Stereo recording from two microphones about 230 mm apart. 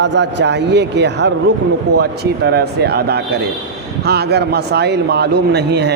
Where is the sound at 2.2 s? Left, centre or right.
Right.